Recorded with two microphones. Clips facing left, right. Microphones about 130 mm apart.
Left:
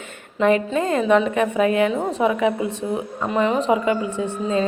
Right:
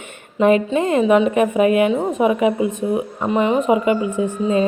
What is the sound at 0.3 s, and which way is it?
A woman's voice, 20° right (ahead or behind).